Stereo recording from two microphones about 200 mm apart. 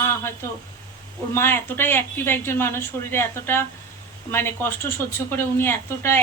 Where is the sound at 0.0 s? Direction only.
10° left (ahead or behind).